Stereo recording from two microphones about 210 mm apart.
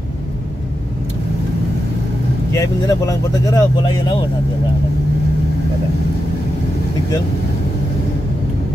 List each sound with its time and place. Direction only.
2.5 s speech: 15° left (ahead or behind)